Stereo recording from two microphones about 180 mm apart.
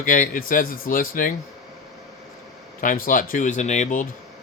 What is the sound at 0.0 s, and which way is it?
Speech, 50° left (ahead or behind).